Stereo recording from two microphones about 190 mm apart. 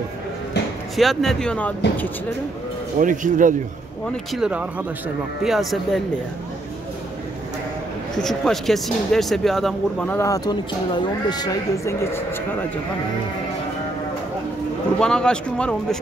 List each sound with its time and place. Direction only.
0.9 s speech: centre (ahead or behind)
3.0 s speech: 45° right (ahead or behind)
4.3 s speech: 5° right (ahead or behind)
8.2 s speech: centre (ahead or behind)
15.0 s speech: 5° left (ahead or behind)